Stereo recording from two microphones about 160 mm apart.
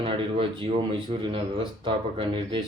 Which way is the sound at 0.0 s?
35° right (ahead or behind).